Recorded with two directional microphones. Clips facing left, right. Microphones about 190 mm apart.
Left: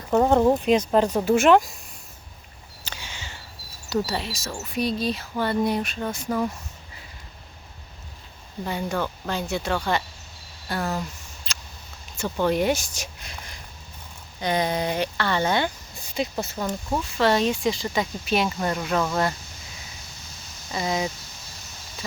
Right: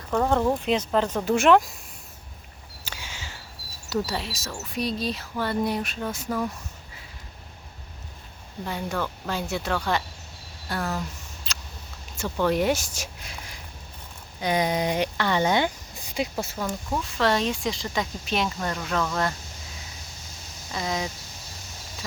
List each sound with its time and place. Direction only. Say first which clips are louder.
0.1 s speech: left 4 dB; 25° left (ahead or behind); by 1.7 s centre (ahead or behind)
2.8 s a sound: left 1 dB; 5° right (ahead or behind)
3.8 s speech: left 2 dB; centre (ahead or behind)
8.6 s speech: left 2 dB; centre (ahead or behind)
11.5 s a sound: even; centre (ahead or behind)
12.5 s speech: left 1 dB; centre (ahead or behind)
20.7 s speech: left 3 dB; 5° left (ahead or behind)